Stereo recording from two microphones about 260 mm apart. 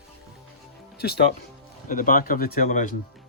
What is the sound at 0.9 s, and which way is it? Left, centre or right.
Speech, left.